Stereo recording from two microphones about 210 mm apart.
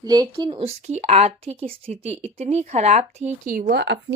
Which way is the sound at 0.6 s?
30° right (ahead or behind).